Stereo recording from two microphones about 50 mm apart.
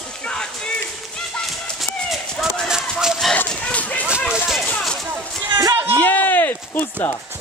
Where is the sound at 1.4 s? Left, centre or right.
Centre.